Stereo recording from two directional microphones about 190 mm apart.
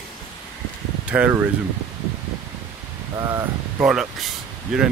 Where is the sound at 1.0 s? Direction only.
5° right (ahead or behind).